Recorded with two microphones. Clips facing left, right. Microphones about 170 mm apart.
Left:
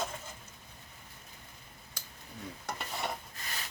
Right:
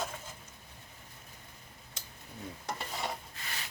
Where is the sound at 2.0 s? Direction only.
25° right (ahead or behind).